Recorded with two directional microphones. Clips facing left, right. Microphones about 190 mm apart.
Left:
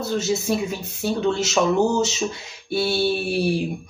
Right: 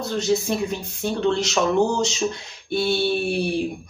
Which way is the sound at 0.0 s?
5° left (ahead or behind).